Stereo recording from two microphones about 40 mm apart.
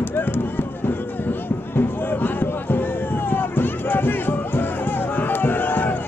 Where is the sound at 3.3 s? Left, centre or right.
Left.